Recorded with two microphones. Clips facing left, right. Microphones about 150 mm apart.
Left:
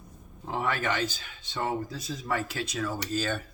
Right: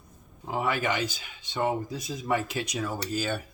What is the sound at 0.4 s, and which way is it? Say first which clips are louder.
Speech: right 2 dB; 10° right (ahead or behind).